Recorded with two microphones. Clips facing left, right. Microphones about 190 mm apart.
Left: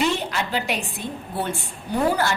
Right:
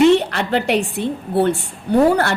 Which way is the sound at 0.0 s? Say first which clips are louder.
Right 10 dB; 65° right (ahead or behind).